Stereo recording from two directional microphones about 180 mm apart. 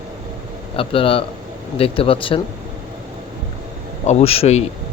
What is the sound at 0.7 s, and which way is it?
Speech, 30° left (ahead or behind).